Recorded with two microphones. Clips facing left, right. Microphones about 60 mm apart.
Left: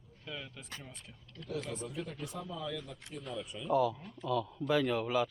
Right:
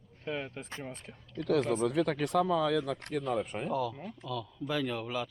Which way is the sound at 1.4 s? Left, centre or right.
Right.